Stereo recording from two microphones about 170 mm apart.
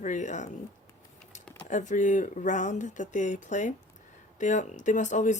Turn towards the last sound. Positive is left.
turn(degrees=45)  # may be behind; listen again after turning